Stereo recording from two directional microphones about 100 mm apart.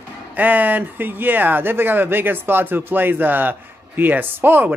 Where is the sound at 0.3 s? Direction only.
15° right (ahead or behind).